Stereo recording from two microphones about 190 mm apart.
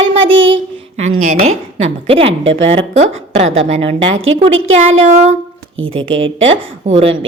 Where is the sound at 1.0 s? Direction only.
35° right (ahead or behind).